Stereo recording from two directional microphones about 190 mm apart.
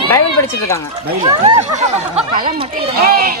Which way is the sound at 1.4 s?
35° right (ahead or behind).